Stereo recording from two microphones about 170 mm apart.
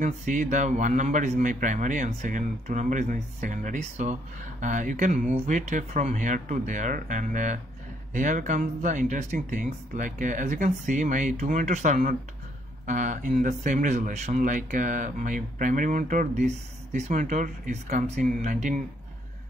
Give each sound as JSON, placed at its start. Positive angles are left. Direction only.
{"t": 0.0, "sound": "a man's voice", "side_deg": -50}